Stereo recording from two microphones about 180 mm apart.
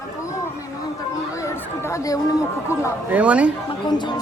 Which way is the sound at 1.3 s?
15° left (ahead or behind).